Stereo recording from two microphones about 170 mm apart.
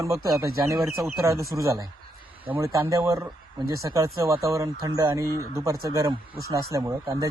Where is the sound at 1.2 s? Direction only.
15° right (ahead or behind).